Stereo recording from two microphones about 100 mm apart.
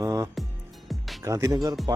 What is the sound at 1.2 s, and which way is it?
Speech, 30° right (ahead or behind).